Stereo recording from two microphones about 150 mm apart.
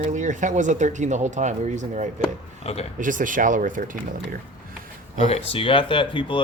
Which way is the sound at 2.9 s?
60° right (ahead or behind).